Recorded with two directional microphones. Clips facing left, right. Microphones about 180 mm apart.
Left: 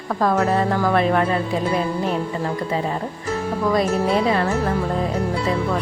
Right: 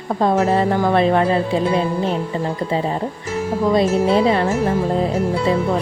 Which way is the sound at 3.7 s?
25° right (ahead or behind).